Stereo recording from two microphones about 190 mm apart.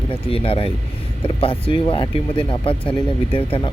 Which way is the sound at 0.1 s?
30° left (ahead or behind).